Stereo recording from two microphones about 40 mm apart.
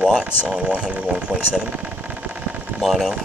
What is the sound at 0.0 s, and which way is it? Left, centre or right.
Speech, right.